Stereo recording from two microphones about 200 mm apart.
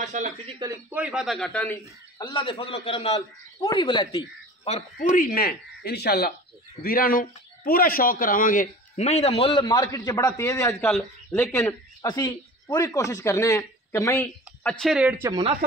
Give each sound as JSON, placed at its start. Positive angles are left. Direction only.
{"t": 0.0, "sound": "a man's voice", "side_deg": -35}
{"t": 0.6, "sound": "a man's voice", "side_deg": -10}
{"t": 2.1, "sound": "a man's voice", "side_deg": 20}
{"t": 4.6, "sound": "speech", "side_deg": 35}
{"t": 5.1, "sound": "speech", "side_deg": 45}